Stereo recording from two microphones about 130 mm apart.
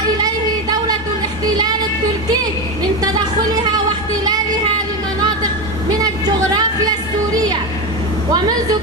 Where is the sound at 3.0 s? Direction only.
30° right (ahead or behind).